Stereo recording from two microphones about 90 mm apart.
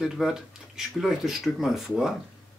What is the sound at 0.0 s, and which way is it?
Speech, 5° right (ahead or behind).